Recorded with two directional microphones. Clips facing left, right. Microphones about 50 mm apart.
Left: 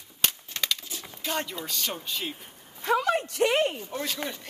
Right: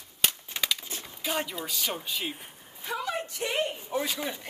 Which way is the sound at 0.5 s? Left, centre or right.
Centre.